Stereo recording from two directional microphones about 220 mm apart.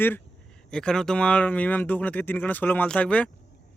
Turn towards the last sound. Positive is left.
turn(degrees=5)  # may be behind; listen again after turning